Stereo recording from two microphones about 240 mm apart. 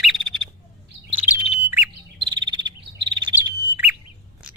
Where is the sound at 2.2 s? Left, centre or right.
Centre.